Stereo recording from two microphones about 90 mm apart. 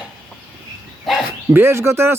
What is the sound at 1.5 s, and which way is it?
Speech, 30° right (ahead or behind).